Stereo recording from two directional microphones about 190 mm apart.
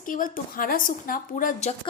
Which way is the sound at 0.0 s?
45° left (ahead or behind).